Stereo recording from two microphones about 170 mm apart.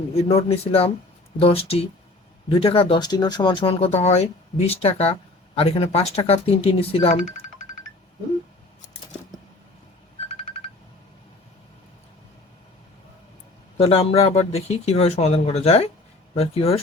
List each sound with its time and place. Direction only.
0.2 s speech: 35° left (ahead or behind)
13.7 s speech: 35° left (ahead or behind)